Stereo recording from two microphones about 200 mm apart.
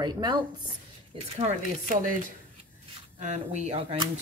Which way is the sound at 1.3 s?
35° right (ahead or behind).